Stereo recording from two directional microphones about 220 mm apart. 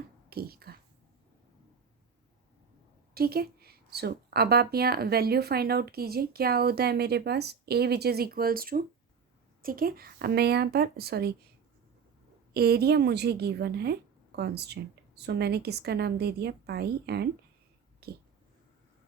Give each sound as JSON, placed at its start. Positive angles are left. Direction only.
{"t": 0.3, "sound": "a woman's voice", "side_deg": -45}
{"t": 3.2, "sound": "a woman's voice", "side_deg": -45}
{"t": 12.5, "sound": "a woman's voice", "side_deg": -45}
{"t": 18.0, "sound": "a sound", "side_deg": -45}